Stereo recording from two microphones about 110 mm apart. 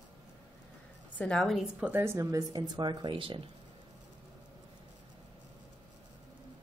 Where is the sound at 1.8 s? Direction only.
20° right (ahead or behind); by 3.4 s 50° right (ahead or behind).